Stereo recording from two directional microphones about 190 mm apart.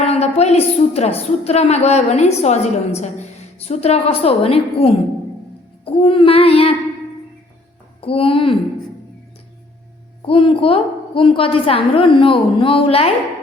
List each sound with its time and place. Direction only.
0.0 s a woman's voice: 35° left (ahead or behind)
8.0 s a woman's voice: 30° left (ahead or behind)
10.2 s a woman's voice: 30° left (ahead or behind)